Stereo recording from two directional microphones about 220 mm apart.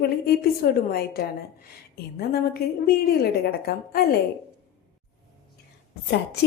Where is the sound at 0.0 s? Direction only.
45° left (ahead or behind).